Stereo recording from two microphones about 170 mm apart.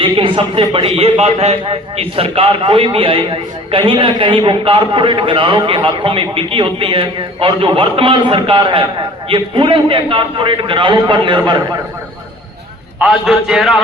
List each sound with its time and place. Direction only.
0.0 s a man's voice: 30° right (ahead or behind)
13.0 s a man's voice: 5° right (ahead or behind)